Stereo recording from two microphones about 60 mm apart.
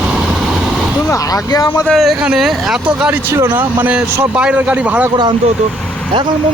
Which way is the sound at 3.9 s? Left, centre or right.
Right.